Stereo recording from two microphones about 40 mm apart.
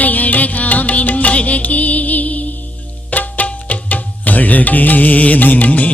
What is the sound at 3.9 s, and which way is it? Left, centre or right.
Music, left.